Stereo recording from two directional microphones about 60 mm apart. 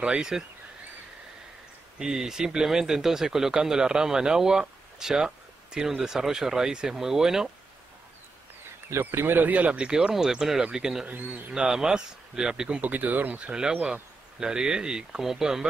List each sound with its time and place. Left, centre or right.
0.0 s speech: centre
2.0 s speech: centre
8.9 s speech: right
13.5 s speech: centre